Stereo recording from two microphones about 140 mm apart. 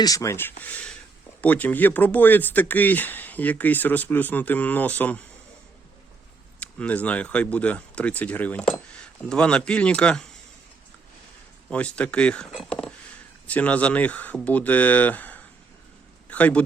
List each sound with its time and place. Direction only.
0.0 s speech: 25° left (ahead or behind)
6.6 s speech: 10° left (ahead or behind)
11.7 s speech: 10° left (ahead or behind)